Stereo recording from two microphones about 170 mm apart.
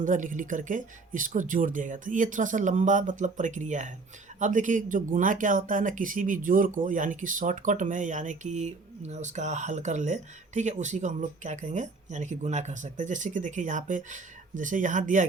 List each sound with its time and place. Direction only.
0.0 s speech: 50° right (ahead or behind)